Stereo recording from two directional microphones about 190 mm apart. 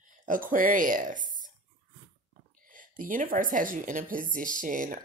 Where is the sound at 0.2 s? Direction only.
45° right (ahead or behind).